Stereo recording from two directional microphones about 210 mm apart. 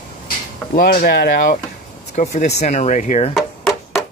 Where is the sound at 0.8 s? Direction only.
45° left (ahead or behind).